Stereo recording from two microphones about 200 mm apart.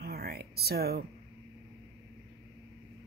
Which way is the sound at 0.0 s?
50° right (ahead or behind).